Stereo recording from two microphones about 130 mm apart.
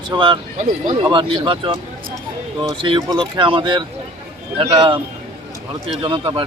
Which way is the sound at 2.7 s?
40° right (ahead or behind).